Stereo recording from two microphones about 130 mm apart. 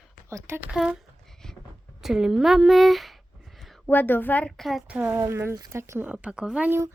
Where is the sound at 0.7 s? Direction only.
5° right (ahead or behind).